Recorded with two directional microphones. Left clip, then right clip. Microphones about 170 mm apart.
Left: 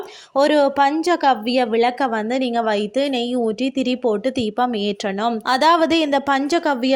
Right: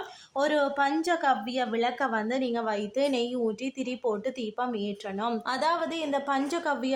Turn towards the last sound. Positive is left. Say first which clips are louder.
# left 10 dB
turn(degrees=45)  # may be behind; listen again after turning